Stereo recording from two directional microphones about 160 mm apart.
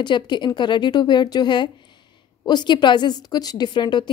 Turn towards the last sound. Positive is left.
turn(degrees=30)  # may be behind; listen again after turning